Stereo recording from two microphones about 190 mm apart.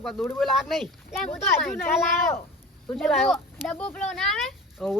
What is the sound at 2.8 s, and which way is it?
Speech, centre (ahead or behind).